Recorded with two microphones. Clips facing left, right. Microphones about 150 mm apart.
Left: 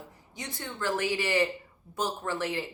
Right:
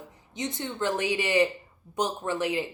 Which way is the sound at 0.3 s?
20° right (ahead or behind).